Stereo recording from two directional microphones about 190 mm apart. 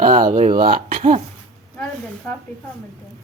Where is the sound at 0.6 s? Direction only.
55° right (ahead or behind).